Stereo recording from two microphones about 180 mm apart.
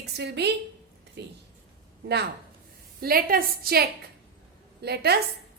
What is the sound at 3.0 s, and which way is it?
A woman's voice, 55° right (ahead or behind).